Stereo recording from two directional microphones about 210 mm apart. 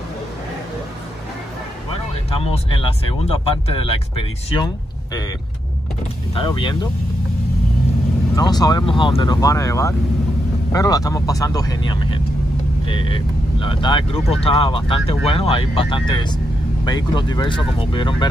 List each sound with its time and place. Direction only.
2.3 s speech: 25° left (ahead or behind)
6.3 s speech: 25° left (ahead or behind)
8.4 s speech: 20° left (ahead or behind)